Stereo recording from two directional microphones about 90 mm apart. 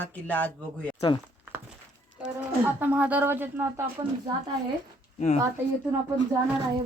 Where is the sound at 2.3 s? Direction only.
20° right (ahead or behind).